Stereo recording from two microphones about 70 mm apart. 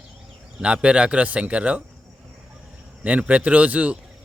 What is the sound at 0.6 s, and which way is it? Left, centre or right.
A man's voice, centre.